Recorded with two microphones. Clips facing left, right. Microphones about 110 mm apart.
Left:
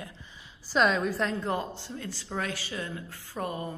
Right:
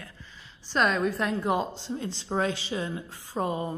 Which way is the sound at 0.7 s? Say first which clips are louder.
Even; centre (ahead or behind).